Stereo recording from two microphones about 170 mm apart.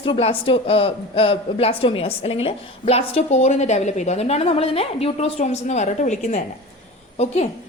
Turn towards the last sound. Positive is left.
turn(degrees=40)  # may be behind; listen again after turning